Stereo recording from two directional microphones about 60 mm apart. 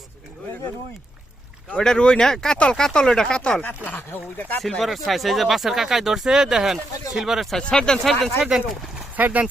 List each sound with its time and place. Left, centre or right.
1.8 s speech: centre
3.8 s speech: left
4.8 s speech: centre
7.6 s speech: centre
8.4 s speech: centre
9.1 s speech: right